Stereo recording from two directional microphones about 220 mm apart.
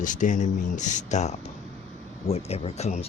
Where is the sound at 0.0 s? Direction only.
35° left (ahead or behind).